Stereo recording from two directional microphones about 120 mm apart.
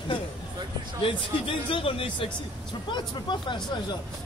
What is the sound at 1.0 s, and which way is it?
A man's voice, 50° left (ahead or behind).